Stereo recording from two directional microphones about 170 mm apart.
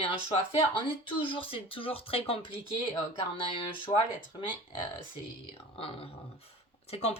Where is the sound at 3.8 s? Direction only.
30° left (ahead or behind).